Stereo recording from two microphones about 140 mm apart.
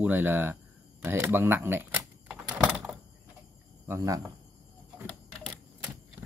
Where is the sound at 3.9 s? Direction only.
25° right (ahead or behind).